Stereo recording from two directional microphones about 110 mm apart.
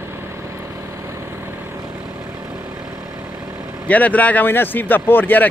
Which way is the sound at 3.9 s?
15° left (ahead or behind).